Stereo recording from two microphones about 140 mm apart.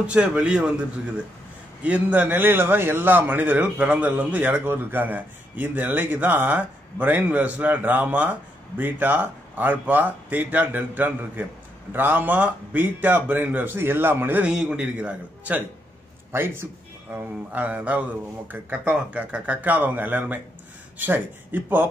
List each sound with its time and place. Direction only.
0.0 s a man's voice: 10° right (ahead or behind)